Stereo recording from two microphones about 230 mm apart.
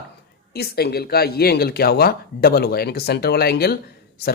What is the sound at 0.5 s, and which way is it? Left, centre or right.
Speech, left.